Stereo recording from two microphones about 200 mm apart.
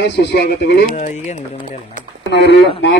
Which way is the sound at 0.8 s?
40° left (ahead or behind).